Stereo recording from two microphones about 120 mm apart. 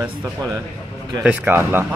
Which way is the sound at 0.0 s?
15° right (ahead or behind).